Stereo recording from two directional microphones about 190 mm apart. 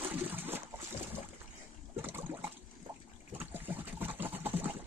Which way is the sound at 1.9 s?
10° right (ahead or behind).